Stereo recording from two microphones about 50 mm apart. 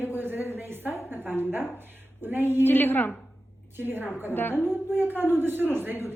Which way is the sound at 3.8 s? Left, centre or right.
Right.